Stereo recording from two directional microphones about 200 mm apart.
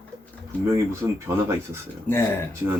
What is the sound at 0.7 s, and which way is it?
Speech, 15° right (ahead or behind).